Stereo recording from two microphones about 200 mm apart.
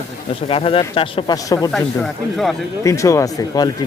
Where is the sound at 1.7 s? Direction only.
Centre (ahead or behind).